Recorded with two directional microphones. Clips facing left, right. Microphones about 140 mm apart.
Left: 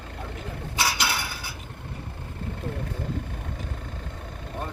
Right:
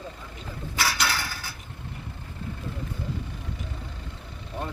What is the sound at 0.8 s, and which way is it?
Mechanisms, 25° left (ahead or behind).